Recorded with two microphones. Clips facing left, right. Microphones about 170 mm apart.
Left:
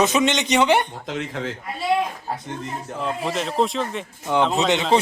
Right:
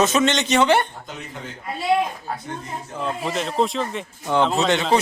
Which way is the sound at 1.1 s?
90° left.